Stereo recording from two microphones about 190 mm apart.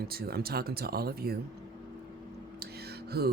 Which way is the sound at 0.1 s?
55° right (ahead or behind).